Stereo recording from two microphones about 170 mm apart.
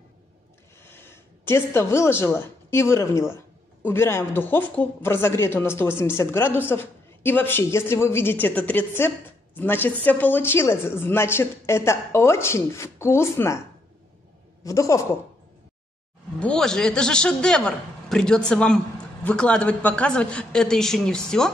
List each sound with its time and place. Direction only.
0.8 s a woman's voice: 15° left (ahead or behind)
14.6 s a man's voice: 20° left (ahead or behind)
16.3 s a man's voice: 5° left (ahead or behind)